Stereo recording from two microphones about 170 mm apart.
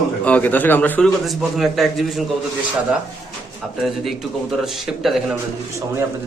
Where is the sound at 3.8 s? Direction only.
Centre (ahead or behind).